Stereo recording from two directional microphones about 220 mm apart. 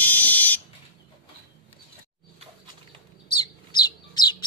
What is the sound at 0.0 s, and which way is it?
Fire alarm, 5° left (ahead or behind).